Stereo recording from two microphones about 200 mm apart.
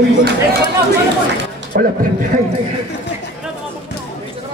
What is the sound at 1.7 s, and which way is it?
Speech, 50° right (ahead or behind).